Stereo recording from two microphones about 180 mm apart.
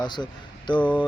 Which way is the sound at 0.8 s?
10° left (ahead or behind).